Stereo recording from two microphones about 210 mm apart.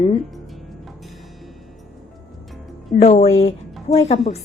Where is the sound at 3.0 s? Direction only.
30° left (ahead or behind).